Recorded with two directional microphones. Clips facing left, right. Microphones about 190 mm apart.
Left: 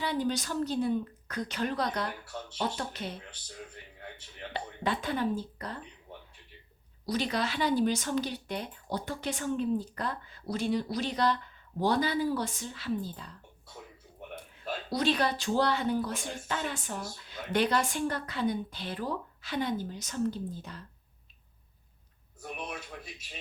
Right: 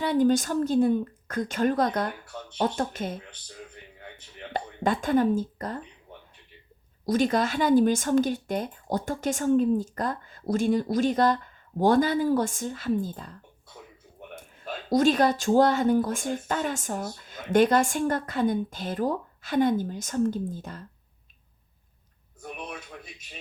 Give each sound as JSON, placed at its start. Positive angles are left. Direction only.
{"t": 0.0, "sound": "speech", "side_deg": -50}
{"t": 4.5, "sound": "speech", "side_deg": -45}
{"t": 7.0, "sound": "speech", "side_deg": -50}
{"t": 14.8, "sound": "speech", "side_deg": -45}
{"t": 22.4, "sound": "a sound", "side_deg": 5}